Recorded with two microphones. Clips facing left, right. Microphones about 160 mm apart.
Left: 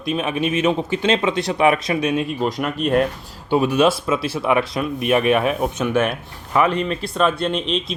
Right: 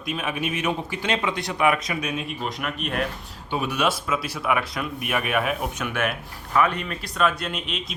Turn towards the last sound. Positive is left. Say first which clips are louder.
# left 5 dB
turn(degrees=30)  # may be behind; listen again after turning